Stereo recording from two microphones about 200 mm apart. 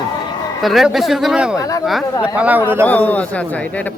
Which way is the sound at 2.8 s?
10° left (ahead or behind).